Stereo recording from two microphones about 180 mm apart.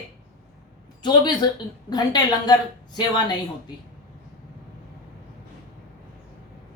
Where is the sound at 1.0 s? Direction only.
25° left (ahead or behind).